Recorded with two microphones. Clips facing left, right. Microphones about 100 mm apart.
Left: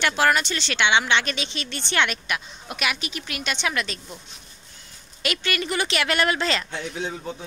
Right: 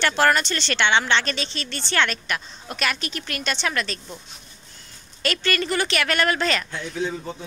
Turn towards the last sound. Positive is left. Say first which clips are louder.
# right 1 dB
turn(degrees=5)  # may be behind; listen again after turning